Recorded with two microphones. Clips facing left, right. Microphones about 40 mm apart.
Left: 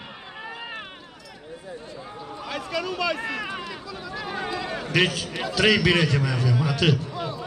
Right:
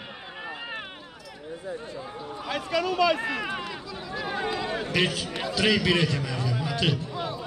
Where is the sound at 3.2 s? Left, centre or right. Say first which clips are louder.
Even; centre.